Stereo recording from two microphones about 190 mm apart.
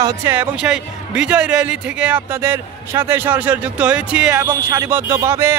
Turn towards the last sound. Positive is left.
turn(degrees=-15)  # may be behind; listen again after turning